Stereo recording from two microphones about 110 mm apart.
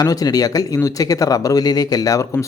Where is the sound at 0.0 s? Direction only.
35° left (ahead or behind).